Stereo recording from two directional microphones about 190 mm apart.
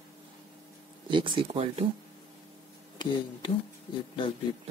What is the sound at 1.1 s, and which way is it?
Speech, 25° right (ahead or behind).